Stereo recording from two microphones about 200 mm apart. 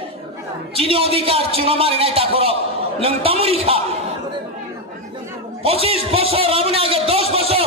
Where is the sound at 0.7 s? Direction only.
30° right (ahead or behind).